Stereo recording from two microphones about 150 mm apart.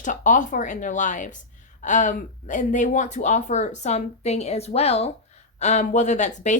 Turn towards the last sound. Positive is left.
turn(degrees=55)  # may be behind; listen again after turning